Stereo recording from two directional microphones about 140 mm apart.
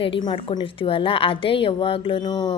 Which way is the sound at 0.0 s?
35° left (ahead or behind).